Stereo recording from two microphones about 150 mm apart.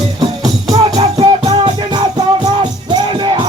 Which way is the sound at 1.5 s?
30° right (ahead or behind).